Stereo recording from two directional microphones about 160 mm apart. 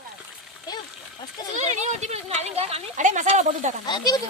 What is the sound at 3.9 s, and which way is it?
Speech, 25° left (ahead or behind).